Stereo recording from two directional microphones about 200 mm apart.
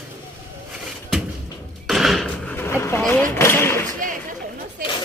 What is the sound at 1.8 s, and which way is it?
Vehicle, centre (ahead or behind).